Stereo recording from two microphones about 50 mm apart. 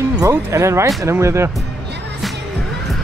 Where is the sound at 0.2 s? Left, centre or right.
Right.